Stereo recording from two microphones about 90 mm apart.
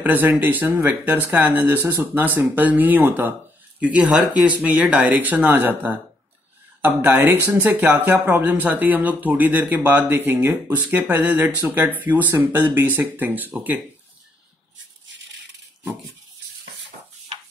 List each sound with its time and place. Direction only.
0.0 s speech: 20° right (ahead or behind)